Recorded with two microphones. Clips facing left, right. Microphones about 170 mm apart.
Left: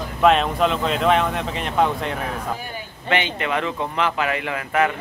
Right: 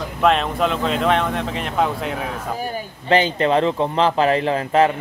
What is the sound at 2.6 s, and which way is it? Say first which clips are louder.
Speech: right 7 dB; 40° right (ahead or behind).